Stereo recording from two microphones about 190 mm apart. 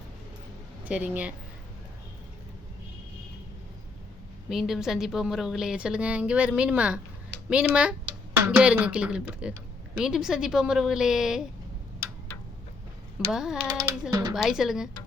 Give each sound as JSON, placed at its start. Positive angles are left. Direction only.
{"t": 0.9, "sound": "speech", "side_deg": -5}
{"t": 4.4, "sound": "a woman's voice", "side_deg": 0}
{"t": 13.3, "sound": "a woman's voice", "side_deg": 0}
{"t": 14.1, "sound": "speech", "side_deg": -20}
{"t": 14.3, "sound": "a woman's voice", "side_deg": 0}